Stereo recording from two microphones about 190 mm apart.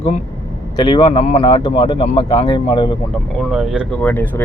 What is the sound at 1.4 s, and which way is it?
Speech, 25° left (ahead or behind).